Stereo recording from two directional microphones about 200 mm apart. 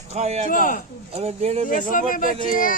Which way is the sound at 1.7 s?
40° left (ahead or behind).